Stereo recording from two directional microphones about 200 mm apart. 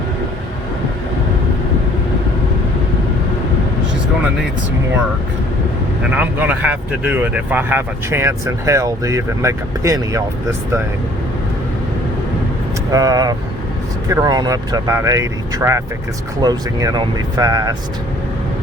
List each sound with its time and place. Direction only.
6.0 s speech: 5° right (ahead or behind)
12.9 s speech: 15° right (ahead or behind)